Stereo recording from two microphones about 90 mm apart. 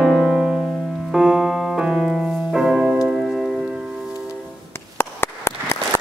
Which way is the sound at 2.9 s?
5° right (ahead or behind).